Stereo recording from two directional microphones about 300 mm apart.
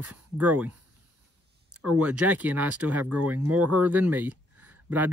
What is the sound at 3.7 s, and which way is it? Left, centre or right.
Speech, centre.